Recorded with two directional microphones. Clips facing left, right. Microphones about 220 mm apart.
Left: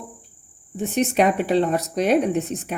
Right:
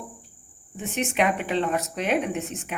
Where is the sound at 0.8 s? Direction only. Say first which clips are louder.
Left 5 dB; 35° left (ahead or behind).